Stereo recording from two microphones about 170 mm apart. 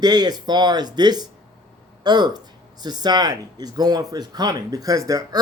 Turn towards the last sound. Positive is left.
turn(degrees=-20)  # may be behind; listen again after turning